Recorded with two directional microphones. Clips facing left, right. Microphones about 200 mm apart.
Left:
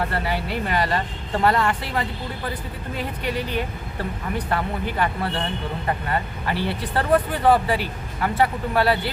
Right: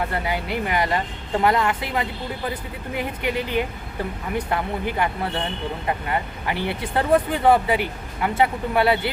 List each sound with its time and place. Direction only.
0.1 s speech: 15° right (ahead or behind)